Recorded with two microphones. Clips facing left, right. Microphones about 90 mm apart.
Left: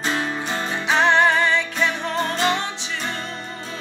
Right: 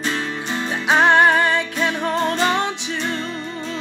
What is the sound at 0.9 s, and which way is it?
Music, 50° right (ahead or behind).